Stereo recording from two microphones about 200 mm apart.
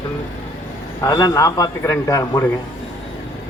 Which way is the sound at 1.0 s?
20° left (ahead or behind).